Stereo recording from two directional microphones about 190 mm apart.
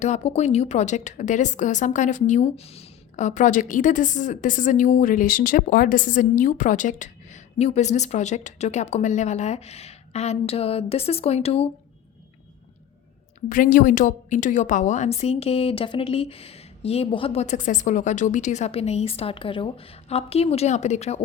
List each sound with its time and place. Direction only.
0.0 s a woman's voice: 35° left (ahead or behind)
13.5 s a woman's voice: 45° left (ahead or behind)